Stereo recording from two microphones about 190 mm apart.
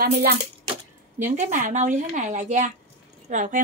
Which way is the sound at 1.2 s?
40° right (ahead or behind).